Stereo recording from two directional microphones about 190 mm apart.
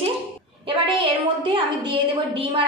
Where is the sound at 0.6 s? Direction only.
25° right (ahead or behind).